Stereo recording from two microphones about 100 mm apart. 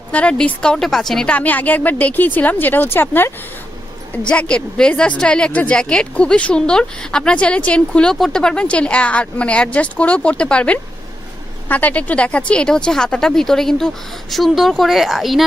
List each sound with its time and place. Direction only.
0.1 s speech: 10° left (ahead or behind)